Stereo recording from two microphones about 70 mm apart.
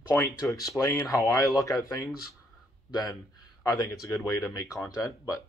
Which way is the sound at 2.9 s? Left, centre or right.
Left.